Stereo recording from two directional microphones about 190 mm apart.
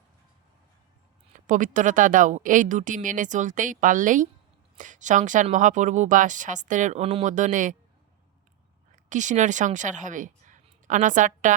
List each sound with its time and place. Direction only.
1.3 s a woman's voice: 45° right (ahead or behind)
9.0 s a woman's voice: 40° right (ahead or behind)